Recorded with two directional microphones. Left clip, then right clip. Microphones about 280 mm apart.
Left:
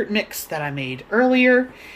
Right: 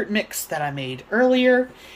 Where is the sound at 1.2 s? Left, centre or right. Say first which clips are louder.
Left 1 dB; right.